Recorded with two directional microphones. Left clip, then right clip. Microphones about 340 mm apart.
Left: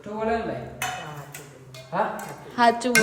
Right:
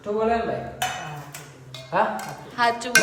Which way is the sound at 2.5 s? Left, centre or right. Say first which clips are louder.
Left 3 dB; centre.